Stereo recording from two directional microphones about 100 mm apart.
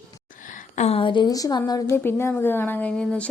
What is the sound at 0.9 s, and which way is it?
Speech, 65° left (ahead or behind).